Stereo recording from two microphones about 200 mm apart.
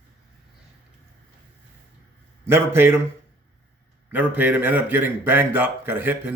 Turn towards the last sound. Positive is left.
turn(degrees=-10)  # may be behind; listen again after turning